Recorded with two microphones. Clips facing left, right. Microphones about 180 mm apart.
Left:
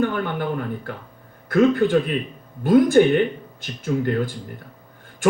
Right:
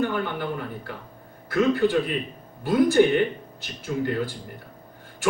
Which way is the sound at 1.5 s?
50° left (ahead or behind).